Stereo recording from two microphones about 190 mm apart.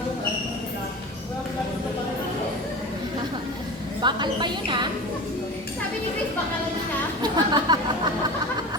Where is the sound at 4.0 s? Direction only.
25° right (ahead or behind).